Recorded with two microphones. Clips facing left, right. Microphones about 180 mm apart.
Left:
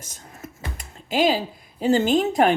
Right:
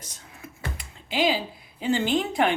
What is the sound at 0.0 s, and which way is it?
Computer keyboard, 45° left (ahead or behind).